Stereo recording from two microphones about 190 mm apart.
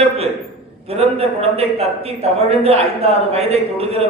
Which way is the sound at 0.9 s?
35° right (ahead or behind).